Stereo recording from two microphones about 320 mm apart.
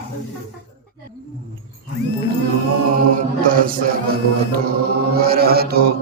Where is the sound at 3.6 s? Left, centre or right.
Right.